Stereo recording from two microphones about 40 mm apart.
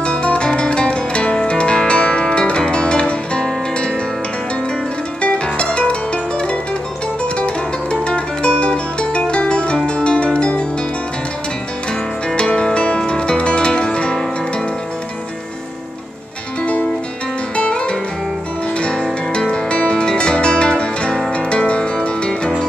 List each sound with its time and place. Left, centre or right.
0.0 s music: left
5.2 s music: left
12.4 s music: left
17.6 s music: left